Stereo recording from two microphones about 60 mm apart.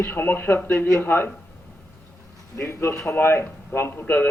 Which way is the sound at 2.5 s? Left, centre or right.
Left.